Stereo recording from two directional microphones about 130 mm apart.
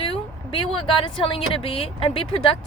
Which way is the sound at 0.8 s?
40° left (ahead or behind).